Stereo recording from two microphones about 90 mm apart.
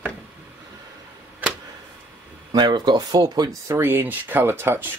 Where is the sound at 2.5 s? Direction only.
50° right (ahead or behind).